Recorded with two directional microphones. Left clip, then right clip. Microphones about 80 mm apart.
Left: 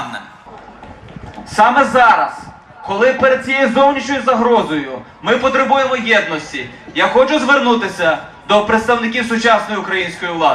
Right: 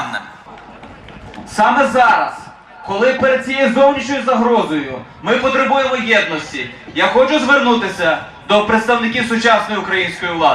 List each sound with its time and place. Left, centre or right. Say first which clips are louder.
1.5 s a man's voice: left 1 dB; left; by 10.5 s centre